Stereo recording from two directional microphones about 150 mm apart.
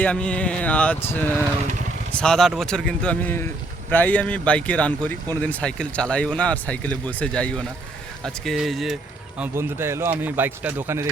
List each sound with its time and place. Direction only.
0.0 s speech: 10° left (ahead or behind)
9.4 s a man's voice: 15° right (ahead or behind)